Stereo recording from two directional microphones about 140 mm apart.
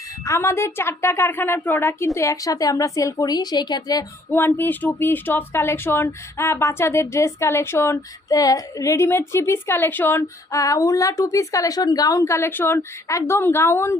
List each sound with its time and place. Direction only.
0.3 s a woman's voice: 20° left (ahead or behind)
4.3 s speech: 15° left (ahead or behind)